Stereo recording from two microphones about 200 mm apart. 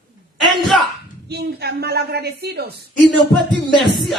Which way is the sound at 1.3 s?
55° right (ahead or behind).